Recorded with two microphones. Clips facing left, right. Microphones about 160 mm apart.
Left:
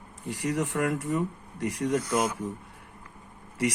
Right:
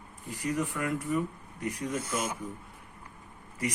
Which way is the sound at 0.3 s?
90° left.